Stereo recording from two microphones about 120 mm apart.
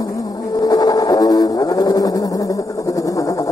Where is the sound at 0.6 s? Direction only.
30° left (ahead or behind).